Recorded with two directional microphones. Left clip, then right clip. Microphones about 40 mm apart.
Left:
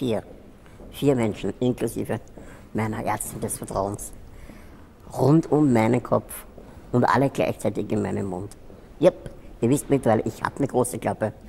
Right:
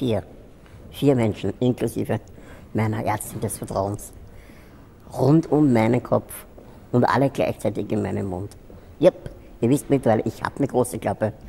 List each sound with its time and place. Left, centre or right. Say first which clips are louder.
0.0 s speech: right 2 dB; left
5.1 s speech: right 1 dB; left